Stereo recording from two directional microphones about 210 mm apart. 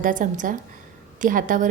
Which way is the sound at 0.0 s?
40° right (ahead or behind).